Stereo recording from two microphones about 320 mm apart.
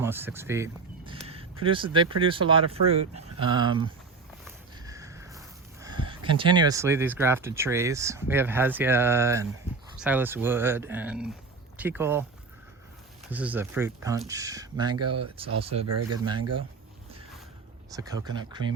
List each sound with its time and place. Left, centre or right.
0.0 s a sound: centre
1.6 s speech: centre
4.9 s speech: centre
13.3 s speech: centre
14.9 s speech: right
15.2 s speech: centre
15.8 s speech: right
17.9 s speech: centre